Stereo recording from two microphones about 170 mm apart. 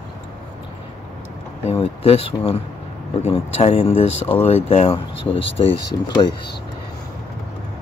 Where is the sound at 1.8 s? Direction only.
35° left (ahead or behind).